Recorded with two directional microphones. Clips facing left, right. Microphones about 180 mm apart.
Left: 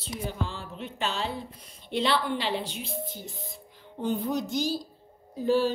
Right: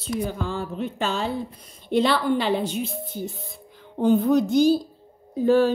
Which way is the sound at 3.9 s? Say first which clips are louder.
Right 10 dB; 60° right (ahead or behind).